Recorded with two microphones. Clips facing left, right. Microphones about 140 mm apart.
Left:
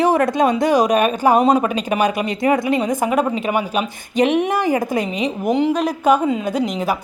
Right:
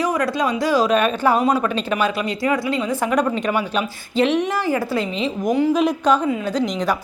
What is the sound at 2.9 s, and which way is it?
A woman's voice, 10° left (ahead or behind).